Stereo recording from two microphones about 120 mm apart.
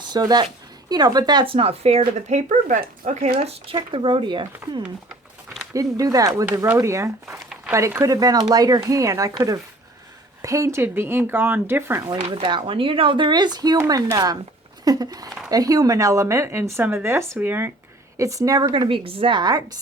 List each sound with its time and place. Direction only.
0.0 s speech: 35° right (ahead or behind); by 3.3 s 90° right
3.3 s speech: 55° right (ahead or behind)
3.9 s speech: 45° right (ahead or behind)
5.7 s speech: 30° right (ahead or behind)
12.1 s speech: 50° right (ahead or behind); by 17.7 s 15° right (ahead or behind)
18.2 s speech: 30° right (ahead or behind)
18.9 s speech: 50° right (ahead or behind); by 19.7 s 35° right (ahead or behind)